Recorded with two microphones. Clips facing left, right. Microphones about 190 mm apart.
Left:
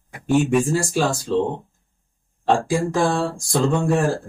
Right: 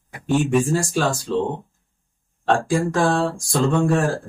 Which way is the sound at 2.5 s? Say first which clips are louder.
Even; 5° left (ahead or behind).